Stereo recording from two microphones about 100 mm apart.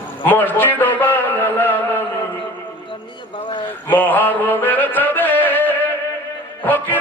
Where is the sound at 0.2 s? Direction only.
15° left (ahead or behind).